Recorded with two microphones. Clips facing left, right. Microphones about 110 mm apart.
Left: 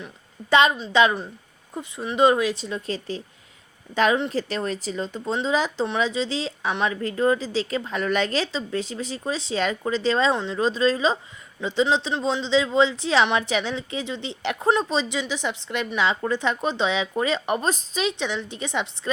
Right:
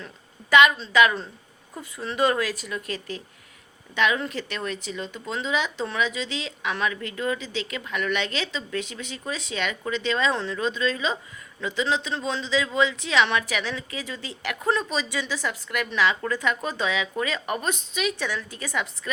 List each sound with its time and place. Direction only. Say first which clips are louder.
0.5 s a woman's voice: even; 30° left (ahead or behind)
10.3 s a woman's voice: left 1 dB; 20° left (ahead or behind)
10.6 s a woman's voice: left 8 dB; 35° left (ahead or behind)
18.2 s a woman's voice: left 3 dB; 25° left (ahead or behind)